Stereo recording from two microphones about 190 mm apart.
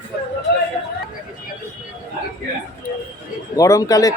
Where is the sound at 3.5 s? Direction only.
20° left (ahead or behind).